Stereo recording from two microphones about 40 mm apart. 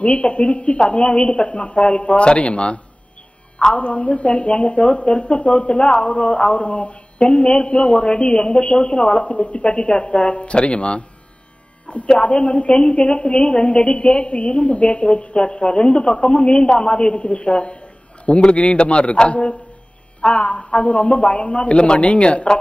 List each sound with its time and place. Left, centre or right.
0.0 s a woman's voice: left
12.1 s a woman's voice: left